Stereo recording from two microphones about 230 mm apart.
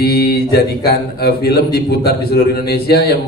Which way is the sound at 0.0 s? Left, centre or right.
Left.